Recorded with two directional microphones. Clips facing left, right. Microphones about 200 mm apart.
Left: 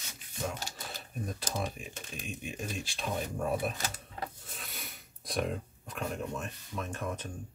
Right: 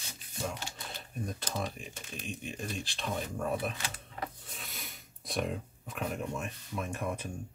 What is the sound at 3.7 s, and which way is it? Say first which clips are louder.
Speech: left 2 dB; 40° left (ahead or behind).